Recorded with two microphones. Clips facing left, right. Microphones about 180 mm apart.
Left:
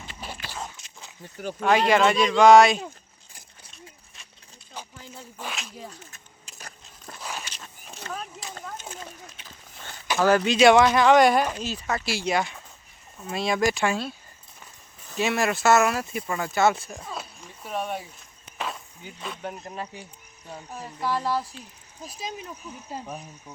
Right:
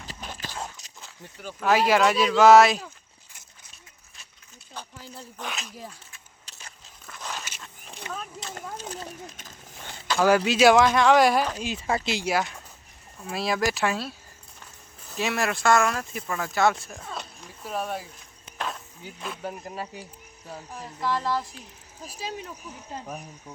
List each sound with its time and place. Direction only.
0.8 s a sound: 40° right (ahead or behind)
1.6 s speech: 5° right (ahead or behind)
5.4 s speech: centre (ahead or behind)
7.2 s walk: 10° left (ahead or behind)
8.1 s speech: 15° right (ahead or behind)
8.8 s speech: 35° right (ahead or behind)
10.2 s speech: 10° right (ahead or behind)
11.5 s speech: 15° right (ahead or behind)
11.8 s speech: 25° right (ahead or behind)
12.2 s speech: 5° right (ahead or behind)
20.8 s speech: 10° left (ahead or behind)